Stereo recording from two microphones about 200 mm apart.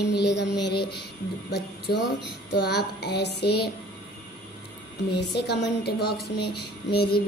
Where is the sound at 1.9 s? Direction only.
55° left (ahead or behind).